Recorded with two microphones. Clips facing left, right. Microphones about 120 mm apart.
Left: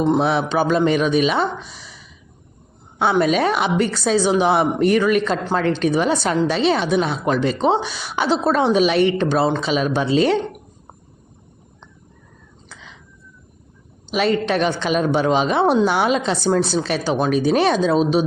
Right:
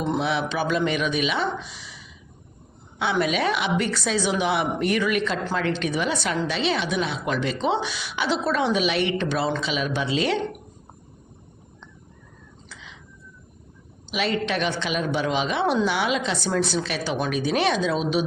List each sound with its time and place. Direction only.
0.2 s a woman's voice: 40° left (ahead or behind)
12.6 s a sound: 45° left (ahead or behind)
14.1 s a woman's voice: 40° left (ahead or behind)